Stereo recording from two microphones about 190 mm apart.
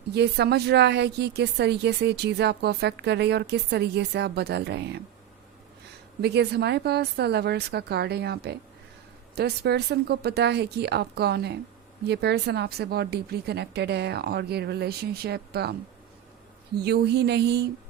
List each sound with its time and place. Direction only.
0.1 s a woman's voice: 60° right (ahead or behind)
6.2 s a woman's voice: 60° right (ahead or behind)
16.7 s a woman's voice: 60° right (ahead or behind)